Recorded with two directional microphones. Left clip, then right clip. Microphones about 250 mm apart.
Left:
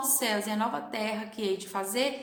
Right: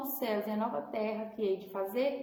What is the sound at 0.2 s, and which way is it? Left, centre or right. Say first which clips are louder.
A woman's voice: left 2 dB; left.